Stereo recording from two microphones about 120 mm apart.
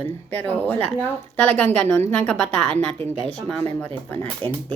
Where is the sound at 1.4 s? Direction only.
10° left (ahead or behind).